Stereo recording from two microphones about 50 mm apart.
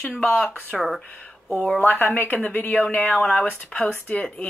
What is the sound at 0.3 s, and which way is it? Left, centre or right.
Speech, left.